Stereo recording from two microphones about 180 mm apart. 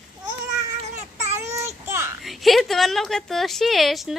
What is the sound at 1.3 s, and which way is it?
Child singing, 15° right (ahead or behind).